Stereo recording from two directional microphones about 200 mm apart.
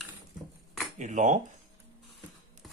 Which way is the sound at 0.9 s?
40° right (ahead or behind).